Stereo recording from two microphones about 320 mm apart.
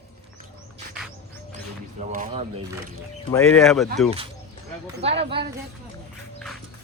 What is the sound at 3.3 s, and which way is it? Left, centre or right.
Speech, centre.